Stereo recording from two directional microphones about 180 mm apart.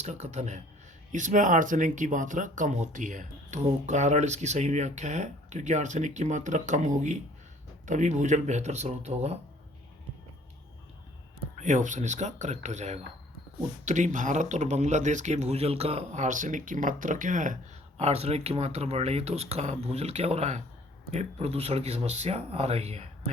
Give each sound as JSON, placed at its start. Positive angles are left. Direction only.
{"t": 0.0, "sound": "speech", "side_deg": -40}
{"t": 11.5, "sound": "speech", "side_deg": -45}